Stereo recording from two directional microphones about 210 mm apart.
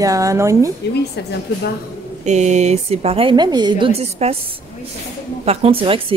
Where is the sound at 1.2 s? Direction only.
55° left (ahead or behind).